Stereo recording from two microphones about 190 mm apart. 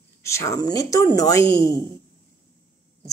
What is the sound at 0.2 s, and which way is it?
Speech, 15° left (ahead or behind).